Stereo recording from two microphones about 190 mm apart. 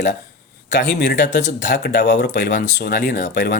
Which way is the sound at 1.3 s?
40° left (ahead or behind).